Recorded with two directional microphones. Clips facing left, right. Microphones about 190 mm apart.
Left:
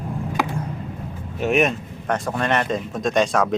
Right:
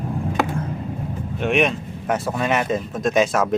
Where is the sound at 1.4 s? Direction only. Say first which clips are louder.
Left 1 dB; centre (ahead or behind).